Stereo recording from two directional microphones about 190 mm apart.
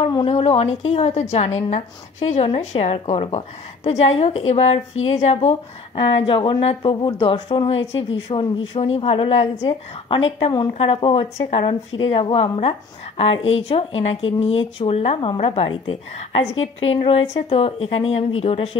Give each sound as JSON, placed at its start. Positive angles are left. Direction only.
{"t": 0.0, "sound": "a woman's voice", "side_deg": 30}
{"t": 7.8, "sound": "speech", "side_deg": 75}
{"t": 8.3, "sound": "a woman's voice", "side_deg": 30}